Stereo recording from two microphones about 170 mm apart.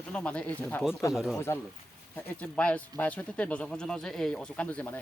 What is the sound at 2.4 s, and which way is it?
Speech, 10° left (ahead or behind).